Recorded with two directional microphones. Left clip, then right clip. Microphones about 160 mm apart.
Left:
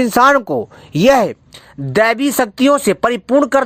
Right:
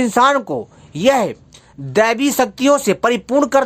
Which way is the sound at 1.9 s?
25° left (ahead or behind).